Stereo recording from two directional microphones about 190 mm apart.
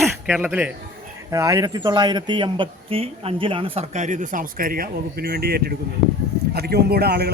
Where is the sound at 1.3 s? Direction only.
15° right (ahead or behind).